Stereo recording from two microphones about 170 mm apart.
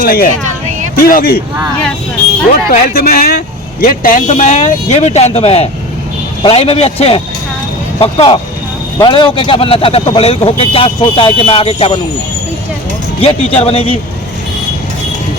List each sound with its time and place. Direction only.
0.0 s a man's voice: 60° left (ahead or behind)
2.6 s speech: 60° left (ahead or behind); by 11.9 s 35° left (ahead or behind)
13.2 s speech: 35° left (ahead or behind)